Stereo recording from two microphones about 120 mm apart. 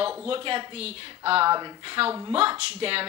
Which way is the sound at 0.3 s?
50° right (ahead or behind).